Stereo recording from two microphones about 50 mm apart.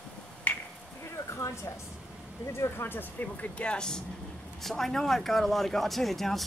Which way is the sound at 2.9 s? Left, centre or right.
Left.